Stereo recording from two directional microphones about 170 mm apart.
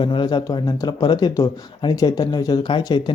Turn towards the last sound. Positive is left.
turn(degrees=25)  # may be behind; listen again after turning